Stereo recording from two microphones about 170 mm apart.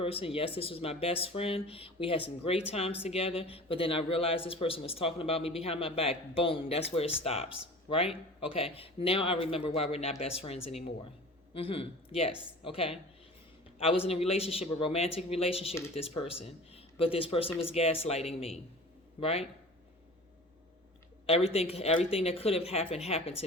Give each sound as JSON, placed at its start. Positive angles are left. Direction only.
{"t": 0.0, "sound": "speech", "side_deg": 35}
{"t": 21.2, "sound": "speech", "side_deg": 35}